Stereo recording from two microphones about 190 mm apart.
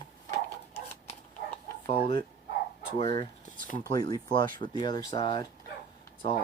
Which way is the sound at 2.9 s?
20° left (ahead or behind).